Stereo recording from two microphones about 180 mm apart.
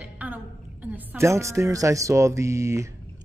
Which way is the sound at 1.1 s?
15° right (ahead or behind).